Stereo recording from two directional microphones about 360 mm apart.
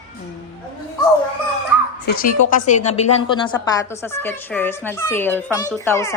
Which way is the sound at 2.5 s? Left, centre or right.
Left.